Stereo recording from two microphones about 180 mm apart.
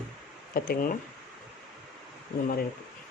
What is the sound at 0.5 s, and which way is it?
Speech, 55° left (ahead or behind).